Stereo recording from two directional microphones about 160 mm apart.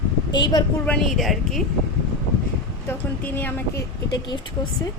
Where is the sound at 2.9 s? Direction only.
10° left (ahead or behind).